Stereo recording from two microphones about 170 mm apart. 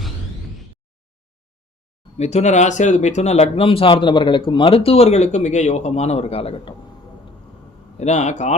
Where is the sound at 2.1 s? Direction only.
40° left (ahead or behind).